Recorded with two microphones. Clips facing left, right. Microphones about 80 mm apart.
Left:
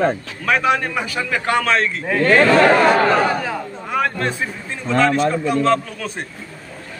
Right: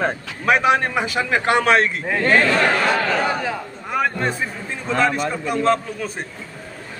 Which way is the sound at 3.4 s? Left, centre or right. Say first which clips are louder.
Left 1 dB; centre.